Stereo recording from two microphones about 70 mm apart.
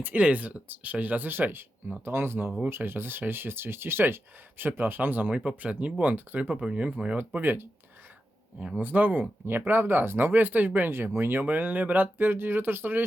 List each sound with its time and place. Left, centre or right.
0.0 s speech: right
5.3 s speech: centre
6.5 s speech: centre; by 7.7 s right
8.5 s speech: centre